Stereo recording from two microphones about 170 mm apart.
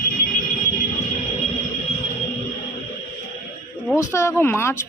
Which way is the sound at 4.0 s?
15° left (ahead or behind).